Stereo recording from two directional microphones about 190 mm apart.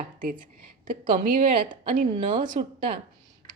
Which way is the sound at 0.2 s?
45° right (ahead or behind).